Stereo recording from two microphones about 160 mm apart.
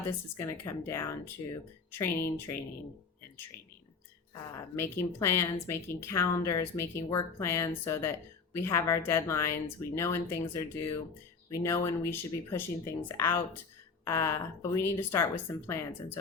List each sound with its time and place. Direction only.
0.3 s a woman's voice: 20° left (ahead or behind)
4.5 s a woman's voice: 15° left (ahead or behind)